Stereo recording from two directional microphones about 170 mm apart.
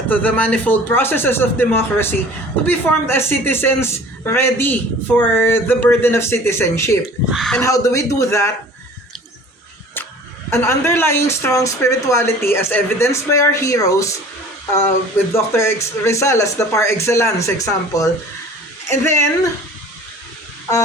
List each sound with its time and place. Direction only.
0.1 s a woman's voice: 10° left (ahead or behind)
7.3 s speech: centre (ahead or behind)
7.6 s a woman's voice: 15° left (ahead or behind)
10.5 s a woman's voice: 15° left (ahead or behind)
15.3 s a woman's voice: 15° left (ahead or behind)